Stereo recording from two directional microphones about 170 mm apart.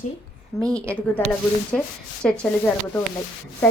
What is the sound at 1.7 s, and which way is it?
A woman's voice, 5° left (ahead or behind).